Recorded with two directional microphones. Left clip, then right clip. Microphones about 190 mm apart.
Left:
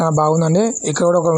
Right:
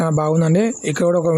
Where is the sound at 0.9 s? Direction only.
35° right (ahead or behind).